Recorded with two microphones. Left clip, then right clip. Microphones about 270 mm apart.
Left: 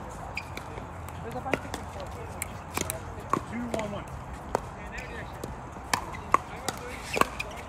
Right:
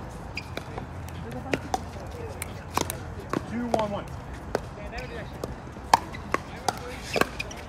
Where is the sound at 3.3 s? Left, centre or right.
Centre.